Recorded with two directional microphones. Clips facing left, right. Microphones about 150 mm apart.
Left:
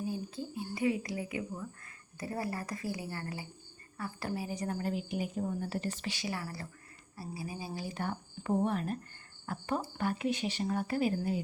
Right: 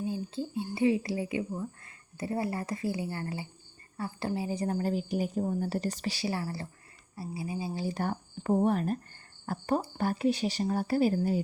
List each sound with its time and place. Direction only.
0.0 s a woman's voice: 25° right (ahead or behind)